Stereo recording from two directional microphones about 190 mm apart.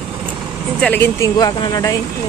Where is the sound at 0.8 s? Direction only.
10° left (ahead or behind).